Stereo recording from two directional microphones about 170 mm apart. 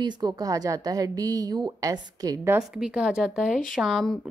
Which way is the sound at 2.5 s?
5° right (ahead or behind).